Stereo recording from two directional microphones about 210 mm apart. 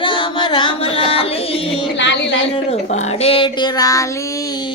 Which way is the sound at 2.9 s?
25° left (ahead or behind).